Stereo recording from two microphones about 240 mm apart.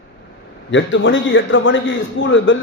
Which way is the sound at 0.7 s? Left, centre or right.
Left.